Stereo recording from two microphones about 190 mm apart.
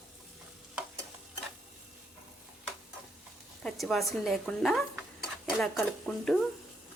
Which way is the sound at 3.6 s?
Centre (ahead or behind).